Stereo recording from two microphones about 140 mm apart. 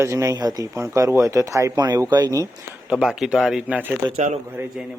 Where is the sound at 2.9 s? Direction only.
5° right (ahead or behind).